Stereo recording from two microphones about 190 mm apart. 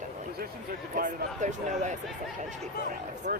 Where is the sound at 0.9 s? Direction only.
40° right (ahead or behind).